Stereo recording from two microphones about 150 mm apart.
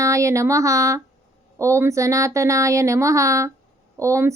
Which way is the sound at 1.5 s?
20° right (ahead or behind).